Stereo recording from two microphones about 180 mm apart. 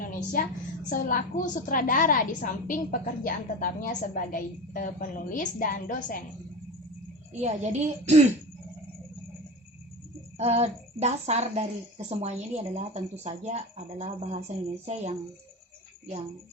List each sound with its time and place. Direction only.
0.0 s a sound: 50° left (ahead or behind)
0.9 s a woman's voice: 50° left (ahead or behind)
7.4 s a woman's voice: 40° right (ahead or behind)
10.3 s a woman's voice: 35° right (ahead or behind)